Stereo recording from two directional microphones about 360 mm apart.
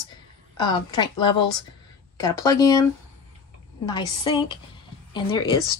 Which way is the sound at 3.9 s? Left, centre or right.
Centre.